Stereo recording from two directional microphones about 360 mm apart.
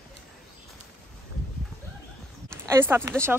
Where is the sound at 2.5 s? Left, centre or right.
Centre.